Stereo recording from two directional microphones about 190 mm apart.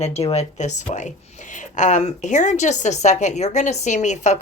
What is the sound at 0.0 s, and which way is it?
A woman's voice, 30° left (ahead or behind).